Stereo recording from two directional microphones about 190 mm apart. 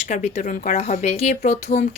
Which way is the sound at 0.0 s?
35° left (ahead or behind).